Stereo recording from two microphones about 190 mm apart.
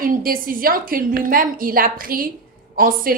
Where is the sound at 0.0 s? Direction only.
50° right (ahead or behind).